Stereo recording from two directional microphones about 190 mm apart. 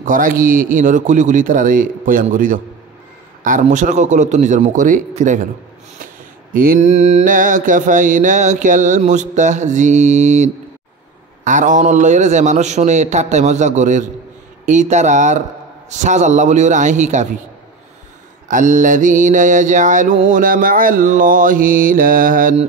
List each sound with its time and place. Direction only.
0.0 s mantra: 45° right (ahead or behind)
6.5 s mantra: 50° right (ahead or behind)
18.5 s mantra: 40° right (ahead or behind)